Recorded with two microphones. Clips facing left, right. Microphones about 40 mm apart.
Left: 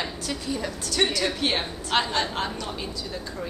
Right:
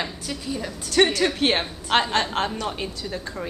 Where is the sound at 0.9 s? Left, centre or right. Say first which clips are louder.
Right 6 dB; right.